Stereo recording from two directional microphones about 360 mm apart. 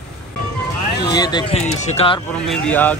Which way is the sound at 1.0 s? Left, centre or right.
Centre.